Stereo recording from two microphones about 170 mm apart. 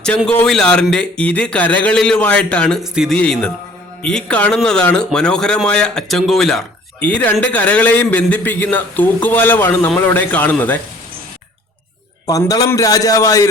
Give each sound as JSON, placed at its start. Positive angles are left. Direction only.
{"t": 0.3, "sound": "a man's voice", "side_deg": 5}
{"t": 12.3, "sound": "a man's voice", "side_deg": 20}